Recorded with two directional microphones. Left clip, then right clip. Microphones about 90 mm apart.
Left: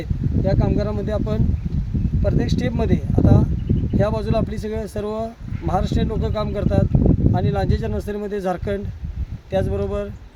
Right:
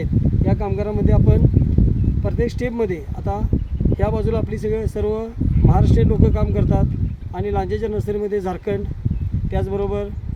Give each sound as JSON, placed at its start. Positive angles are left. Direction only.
{"t": 0.4, "sound": "speech", "side_deg": 30}